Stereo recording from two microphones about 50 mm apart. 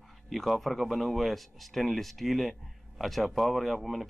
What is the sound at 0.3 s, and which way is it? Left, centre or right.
Speech, centre.